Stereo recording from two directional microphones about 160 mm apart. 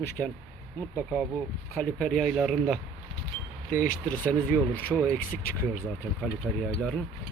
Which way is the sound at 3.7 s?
55° left (ahead or behind).